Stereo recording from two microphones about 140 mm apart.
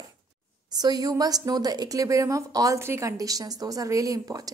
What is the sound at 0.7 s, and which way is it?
A woman's voice, 30° right (ahead or behind).